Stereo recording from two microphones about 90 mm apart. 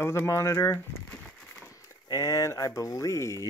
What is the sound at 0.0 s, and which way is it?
Speech, 30° left (ahead or behind).